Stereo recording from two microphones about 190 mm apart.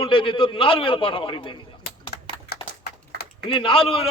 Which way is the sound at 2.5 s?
55° left (ahead or behind).